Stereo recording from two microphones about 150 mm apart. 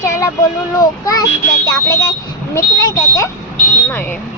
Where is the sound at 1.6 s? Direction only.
20° left (ahead or behind).